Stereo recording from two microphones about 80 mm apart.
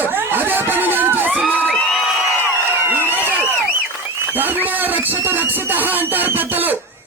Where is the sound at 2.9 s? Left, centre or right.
Right.